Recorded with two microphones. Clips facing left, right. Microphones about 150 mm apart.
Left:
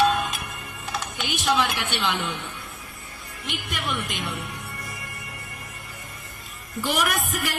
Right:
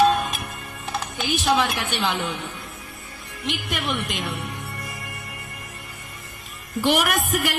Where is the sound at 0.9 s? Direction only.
35° right (ahead or behind).